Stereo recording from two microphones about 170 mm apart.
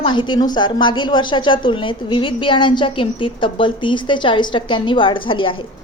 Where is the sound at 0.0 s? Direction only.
25° left (ahead or behind).